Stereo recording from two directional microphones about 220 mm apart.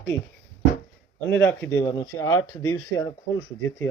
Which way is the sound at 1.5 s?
10° left (ahead or behind).